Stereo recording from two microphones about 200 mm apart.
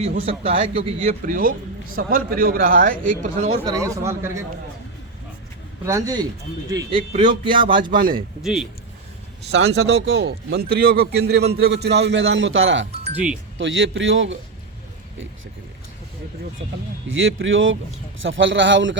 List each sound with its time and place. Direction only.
0.0 s speech: 30° right (ahead or behind)
1.2 s speech: 45° right (ahead or behind)
3.7 s speech: 15° right (ahead or behind)
5.8 s speech: 15° right (ahead or behind)
7.1 s speech: 35° right (ahead or behind)
7.4 s speech: 25° right (ahead or behind)
7.9 s speech: 45° right (ahead or behind)
8.4 s speech: centre (ahead or behind)
9.5 s speech: 60° right (ahead or behind)
13.1 s speech: 5° right (ahead or behind)
13.6 s speech: 70° right (ahead or behind)
17.1 s speech: 75° right (ahead or behind)